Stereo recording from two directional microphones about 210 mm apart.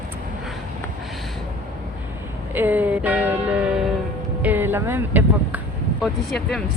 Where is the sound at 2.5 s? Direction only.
10° right (ahead or behind).